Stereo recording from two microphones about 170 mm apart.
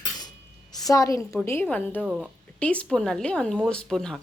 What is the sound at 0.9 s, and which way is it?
Speech, 20° left (ahead or behind).